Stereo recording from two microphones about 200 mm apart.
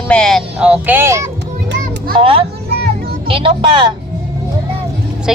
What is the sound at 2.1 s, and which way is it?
A woman's voice, 25° right (ahead or behind).